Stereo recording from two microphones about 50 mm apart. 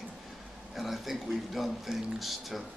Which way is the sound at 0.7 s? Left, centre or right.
Centre.